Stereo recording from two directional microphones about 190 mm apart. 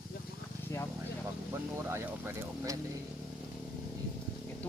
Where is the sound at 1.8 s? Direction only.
15° right (ahead or behind).